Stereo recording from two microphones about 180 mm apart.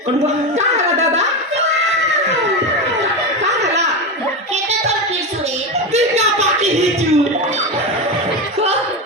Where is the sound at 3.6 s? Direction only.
40° right (ahead or behind).